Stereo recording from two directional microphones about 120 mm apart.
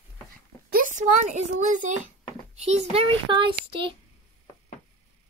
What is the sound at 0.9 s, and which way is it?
A child's voice, 90° right.